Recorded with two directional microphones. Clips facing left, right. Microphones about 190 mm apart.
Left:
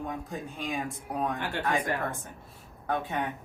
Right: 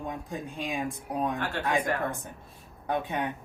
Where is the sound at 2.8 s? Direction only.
15° right (ahead or behind).